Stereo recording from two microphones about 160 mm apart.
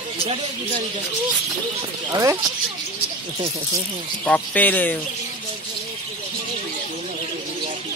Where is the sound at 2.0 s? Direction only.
20° right (ahead or behind).